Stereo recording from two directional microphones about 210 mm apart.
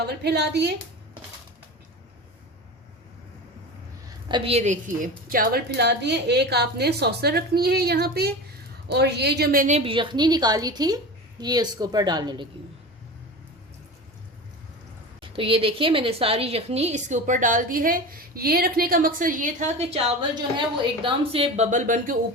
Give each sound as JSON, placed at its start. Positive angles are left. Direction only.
{"t": 0.0, "sound": "a woman's voice", "side_deg": -50}
{"t": 4.3, "sound": "a woman's voice", "side_deg": -25}
{"t": 15.2, "sound": "a woman's voice", "side_deg": -25}